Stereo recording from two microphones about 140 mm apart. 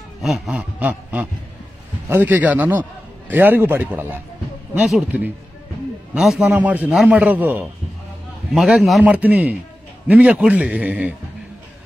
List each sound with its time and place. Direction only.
0.2 s a man's voice: 5° right (ahead or behind)